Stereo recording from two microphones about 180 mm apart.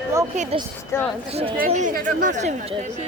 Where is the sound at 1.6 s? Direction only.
40° right (ahead or behind).